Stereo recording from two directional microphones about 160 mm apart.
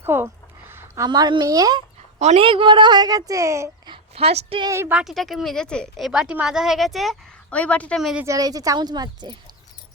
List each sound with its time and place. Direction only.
0.0 s speech: 15° right (ahead or behind)
2.1 s a woman's voice: 40° right (ahead or behind); by 3.9 s 20° right (ahead or behind)
3.9 s speech: 40° right (ahead or behind)
4.7 s speech: 15° right (ahead or behind)
8.2 s a woman's voice: 20° right (ahead or behind)